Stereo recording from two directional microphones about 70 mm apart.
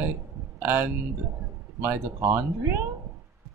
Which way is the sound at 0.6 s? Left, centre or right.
Right.